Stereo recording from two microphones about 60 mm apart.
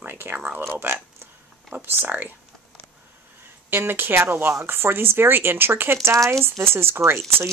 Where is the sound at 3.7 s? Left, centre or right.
Right.